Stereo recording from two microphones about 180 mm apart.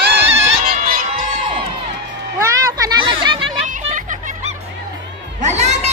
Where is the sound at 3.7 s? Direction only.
45° right (ahead or behind).